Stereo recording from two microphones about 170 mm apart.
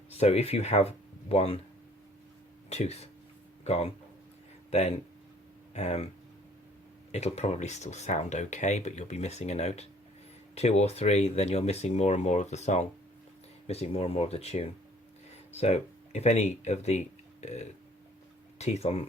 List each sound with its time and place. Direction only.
0.1 s speech: 40° left (ahead or behind)
2.6 s speech: 40° left (ahead or behind)
7.1 s speech: 40° left (ahead or behind)